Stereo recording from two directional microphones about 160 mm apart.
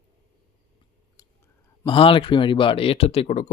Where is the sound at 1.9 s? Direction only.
35° left (ahead or behind).